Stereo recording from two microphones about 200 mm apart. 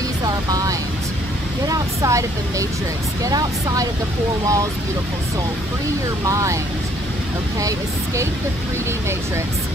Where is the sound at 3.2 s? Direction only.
15° right (ahead or behind).